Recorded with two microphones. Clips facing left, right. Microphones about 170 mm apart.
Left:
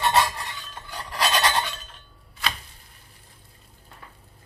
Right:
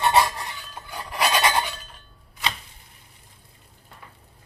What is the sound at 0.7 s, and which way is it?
Filing, 10° right (ahead or behind).